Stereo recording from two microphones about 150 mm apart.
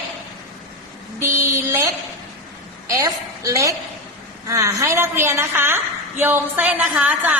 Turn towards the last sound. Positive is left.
turn(degrees=-10)  # may be behind; listen again after turning